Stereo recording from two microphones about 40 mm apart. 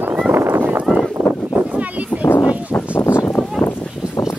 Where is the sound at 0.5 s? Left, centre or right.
Right.